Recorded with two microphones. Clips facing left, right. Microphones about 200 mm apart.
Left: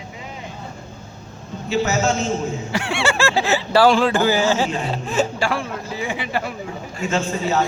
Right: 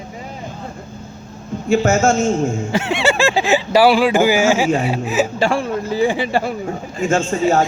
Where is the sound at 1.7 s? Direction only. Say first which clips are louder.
Right 5 dB; 50° right (ahead or behind).